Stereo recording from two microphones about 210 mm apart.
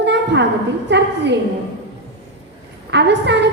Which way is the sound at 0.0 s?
55° right (ahead or behind).